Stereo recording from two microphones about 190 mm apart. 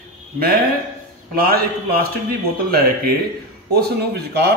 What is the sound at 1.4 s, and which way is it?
Speech, 55° right (ahead or behind).